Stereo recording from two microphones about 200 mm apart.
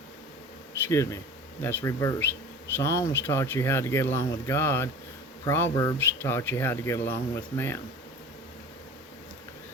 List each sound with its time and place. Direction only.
0.9 s speech: 15° left (ahead or behind)